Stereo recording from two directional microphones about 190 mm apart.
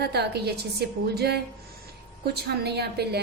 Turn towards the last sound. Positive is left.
turn(degrees=-60)  # may be behind; listen again after turning